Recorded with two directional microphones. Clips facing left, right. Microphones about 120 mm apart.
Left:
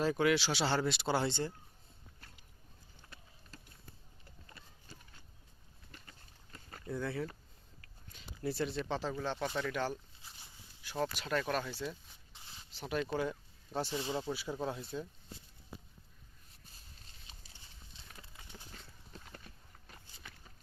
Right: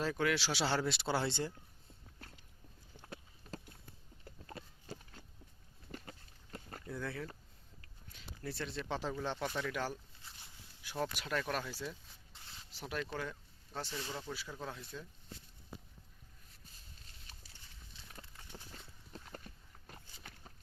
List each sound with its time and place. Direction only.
0.0 s speech: 10° left (ahead or behind)
0.4 s speech: centre (ahead or behind)
6.8 s speech: 5° left (ahead or behind)
8.4 s speech: 10° left (ahead or behind)
8.9 s speech: 15° right (ahead or behind)
9.6 s speech: centre (ahead or behind)
11.2 s speech: centre (ahead or behind)
11.8 s a sound: centre (ahead or behind)
13.0 s speech: 15° left (ahead or behind)
19.1 s horse: 40° right (ahead or behind)